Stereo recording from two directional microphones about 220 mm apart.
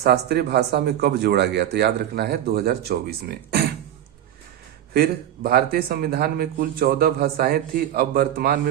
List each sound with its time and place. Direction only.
0.0 s speech: 45° right (ahead or behind)
4.9 s speech: 45° right (ahead or behind)